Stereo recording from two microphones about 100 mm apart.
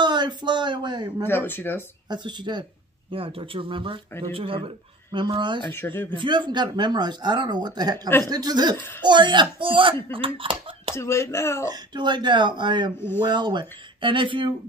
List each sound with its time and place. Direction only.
0.0 s a sound: 50° right (ahead or behind)
1.2 s speech: 20° left (ahead or behind)
2.0 s speech: 50° right (ahead or behind)
3.1 s speech: 65° right (ahead or behind)
5.7 s speech: 25° left (ahead or behind)
6.1 s speech: 50° right (ahead or behind)
11.0 s speech: 30° left (ahead or behind)
11.7 s speech: 45° right (ahead or behind)